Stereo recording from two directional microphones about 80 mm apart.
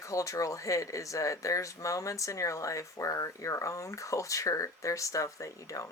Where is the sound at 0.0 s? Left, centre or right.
Left.